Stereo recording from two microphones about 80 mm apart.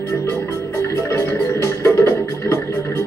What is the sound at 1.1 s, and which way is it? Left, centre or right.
Music, left.